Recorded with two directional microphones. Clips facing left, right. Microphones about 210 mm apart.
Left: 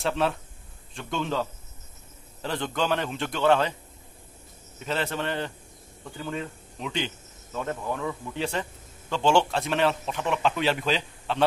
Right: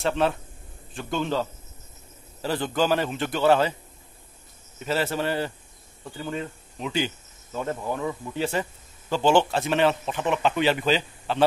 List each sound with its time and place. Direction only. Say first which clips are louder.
0.0 s speech: right 2 dB; centre (ahead or behind)
4.7 s speech: right 3 dB; 5° right (ahead or behind)